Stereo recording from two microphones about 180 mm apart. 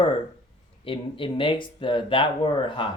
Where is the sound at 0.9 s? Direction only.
30° left (ahead or behind).